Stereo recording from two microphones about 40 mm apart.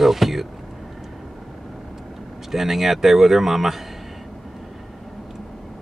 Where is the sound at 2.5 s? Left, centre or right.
Centre.